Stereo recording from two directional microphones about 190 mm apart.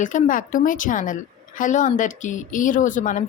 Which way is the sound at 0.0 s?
40° left (ahead or behind).